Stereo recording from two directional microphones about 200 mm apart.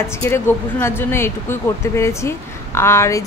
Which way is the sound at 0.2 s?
10° left (ahead or behind).